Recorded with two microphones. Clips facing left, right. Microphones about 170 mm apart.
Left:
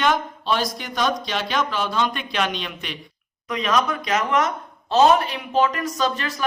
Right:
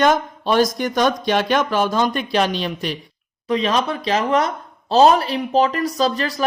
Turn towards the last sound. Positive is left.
turn(degrees=-35)  # may be behind; listen again after turning